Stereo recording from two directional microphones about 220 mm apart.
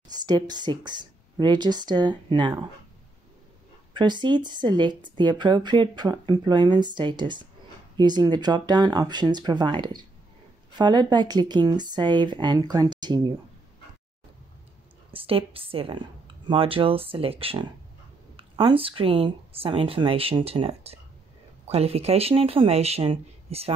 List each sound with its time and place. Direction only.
0.1 s speech: 20° right (ahead or behind)
3.9 s speech: 20° right (ahead or behind)
15.1 s speech: 25° right (ahead or behind)